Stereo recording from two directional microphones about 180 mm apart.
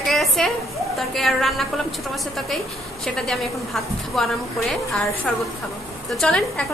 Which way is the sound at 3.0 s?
Centre (ahead or behind).